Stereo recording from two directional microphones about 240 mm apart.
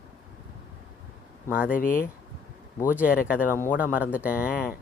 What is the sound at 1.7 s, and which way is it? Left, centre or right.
Speech, left.